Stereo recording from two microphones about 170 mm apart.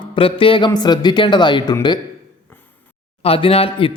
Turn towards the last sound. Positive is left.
turn(degrees=35)  # may be behind; listen again after turning